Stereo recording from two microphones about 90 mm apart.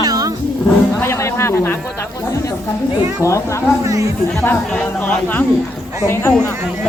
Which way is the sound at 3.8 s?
35° right (ahead or behind).